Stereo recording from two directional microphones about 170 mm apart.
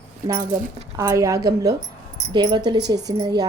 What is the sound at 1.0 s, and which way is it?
A woman's voice, 15° right (ahead or behind).